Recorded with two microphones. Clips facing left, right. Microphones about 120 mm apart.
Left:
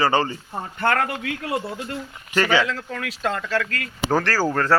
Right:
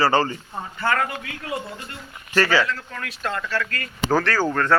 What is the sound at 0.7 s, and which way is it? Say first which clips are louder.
Speech: left 1 dB; 60° left (ahead or behind).